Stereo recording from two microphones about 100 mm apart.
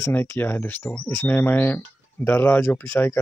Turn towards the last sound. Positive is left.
turn(degrees=25)  # may be behind; listen again after turning